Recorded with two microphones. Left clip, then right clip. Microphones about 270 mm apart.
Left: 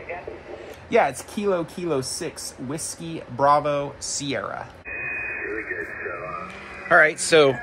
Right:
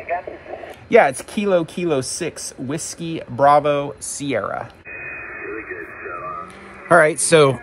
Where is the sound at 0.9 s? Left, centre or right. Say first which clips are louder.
Right 6 dB; right; by 5.3 s centre.